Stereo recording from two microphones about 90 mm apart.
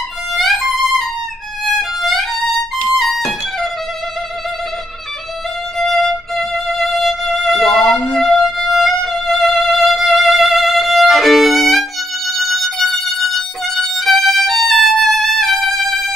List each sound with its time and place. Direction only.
0.4 s violin: centre (ahead or behind)
2.9 s music: centre (ahead or behind)
5.8 s music: 5° left (ahead or behind)
13.7 s violin: centre (ahead or behind)